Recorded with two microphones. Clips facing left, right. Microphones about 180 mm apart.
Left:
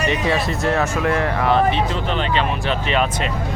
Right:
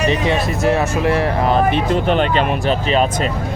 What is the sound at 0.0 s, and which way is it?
Speech, 30° right (ahead or behind).